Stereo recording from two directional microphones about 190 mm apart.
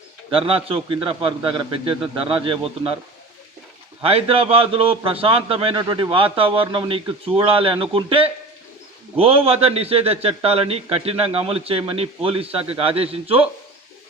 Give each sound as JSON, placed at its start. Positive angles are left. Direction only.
{"t": 0.3, "sound": "a man's voice", "side_deg": -30}
{"t": 4.0, "sound": "a man's voice", "side_deg": -30}